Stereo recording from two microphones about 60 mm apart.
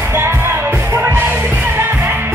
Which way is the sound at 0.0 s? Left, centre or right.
Right.